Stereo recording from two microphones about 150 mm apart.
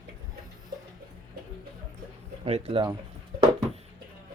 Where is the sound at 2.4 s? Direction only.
40° right (ahead or behind).